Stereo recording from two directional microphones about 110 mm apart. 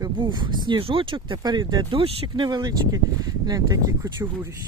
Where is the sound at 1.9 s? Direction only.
55° right (ahead or behind); by 4.5 s 25° right (ahead or behind).